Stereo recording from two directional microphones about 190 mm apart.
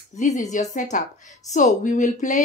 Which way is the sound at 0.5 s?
40° left (ahead or behind).